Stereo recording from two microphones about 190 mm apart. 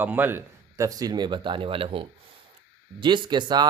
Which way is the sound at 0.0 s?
10° right (ahead or behind).